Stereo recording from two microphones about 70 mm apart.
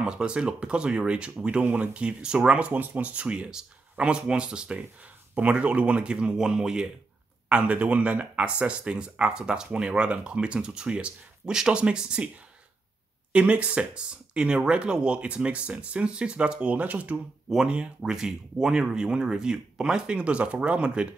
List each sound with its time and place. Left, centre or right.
0.0 s speech: centre
13.3 s speech: centre
17.5 s speech: centre